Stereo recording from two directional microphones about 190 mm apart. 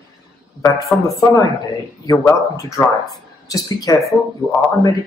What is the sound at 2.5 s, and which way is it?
A man's voice, 15° left (ahead or behind).